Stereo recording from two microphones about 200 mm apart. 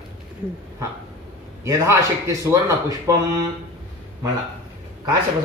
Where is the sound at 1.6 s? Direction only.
15° right (ahead or behind).